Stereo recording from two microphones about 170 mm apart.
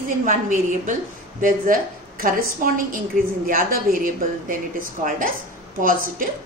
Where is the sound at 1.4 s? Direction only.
55° right (ahead or behind).